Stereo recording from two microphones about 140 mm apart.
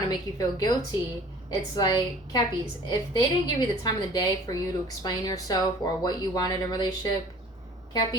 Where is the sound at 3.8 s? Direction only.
25° left (ahead or behind).